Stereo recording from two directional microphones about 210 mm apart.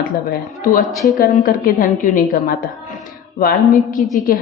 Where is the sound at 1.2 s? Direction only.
40° left (ahead or behind).